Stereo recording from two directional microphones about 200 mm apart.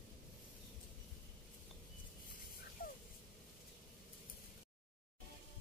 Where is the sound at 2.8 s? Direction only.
50° left (ahead or behind).